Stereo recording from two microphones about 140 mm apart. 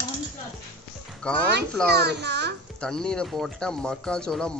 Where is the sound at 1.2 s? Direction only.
5° left (ahead or behind).